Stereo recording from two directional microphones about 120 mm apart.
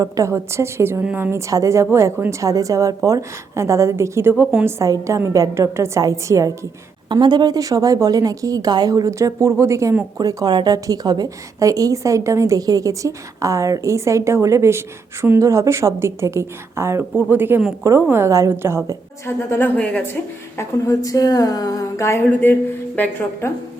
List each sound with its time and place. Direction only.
0.0 s a woman's voice: 25° right (ahead or behind)
7.1 s a woman's voice: 40° right (ahead or behind)
10.2 s a woman's voice: 35° right (ahead or behind)
19.2 s speech: 20° left (ahead or behind)
20.6 s speech: 25° left (ahead or behind)